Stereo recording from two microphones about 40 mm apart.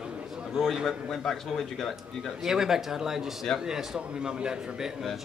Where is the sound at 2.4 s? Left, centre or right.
Centre.